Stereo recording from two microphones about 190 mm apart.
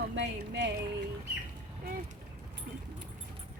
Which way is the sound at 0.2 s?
70° right (ahead or behind).